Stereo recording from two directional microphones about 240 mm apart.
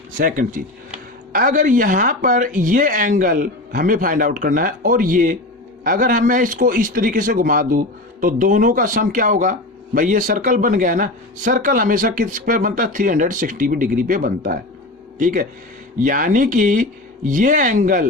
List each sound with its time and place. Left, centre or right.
0.2 s speech: right